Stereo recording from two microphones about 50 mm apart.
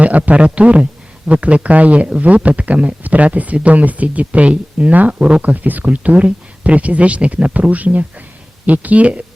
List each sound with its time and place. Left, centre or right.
0.0 s speech: right